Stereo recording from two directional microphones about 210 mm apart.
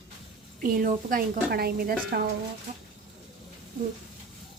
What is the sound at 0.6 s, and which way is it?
A woman's voice, 40° right (ahead or behind).